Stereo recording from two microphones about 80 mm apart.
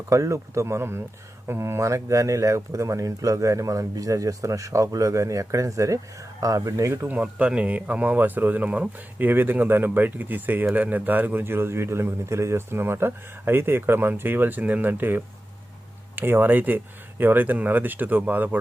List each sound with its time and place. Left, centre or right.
0.1 s speech: right
7.1 s a man's voice: centre